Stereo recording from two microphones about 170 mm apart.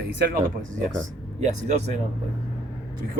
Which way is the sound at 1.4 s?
45° right (ahead or behind).